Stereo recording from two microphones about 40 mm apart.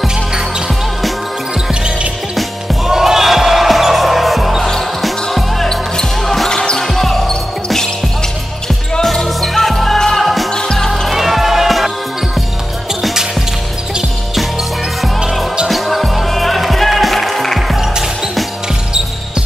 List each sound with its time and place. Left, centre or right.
2.3 s music: centre
2.9 s basketball bounce: centre
5.0 s music: centre
5.7 s basketball bounce: centre
6.5 s basketball bounce: centre
6.8 s basketball bounce: centre
9.0 s music: centre
11.1 s music: centre
15.7 s music: centre